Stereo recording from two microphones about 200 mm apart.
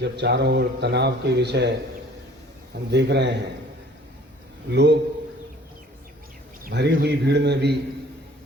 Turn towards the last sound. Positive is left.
turn(degrees=-55)  # may be behind; listen again after turning